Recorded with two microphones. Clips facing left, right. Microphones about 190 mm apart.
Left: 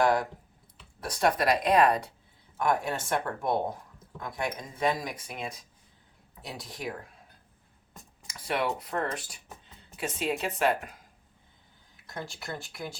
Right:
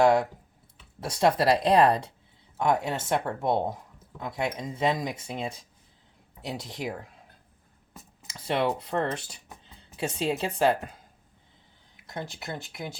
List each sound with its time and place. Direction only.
0.0 s speech: 25° right (ahead or behind)
7.9 s a sound: 5° right (ahead or behind)
8.3 s speech: 25° right (ahead or behind)
12.0 s speech: 20° right (ahead or behind)